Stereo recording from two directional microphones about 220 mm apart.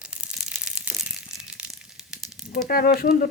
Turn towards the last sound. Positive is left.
turn(degrees=45)  # may be behind; listen again after turning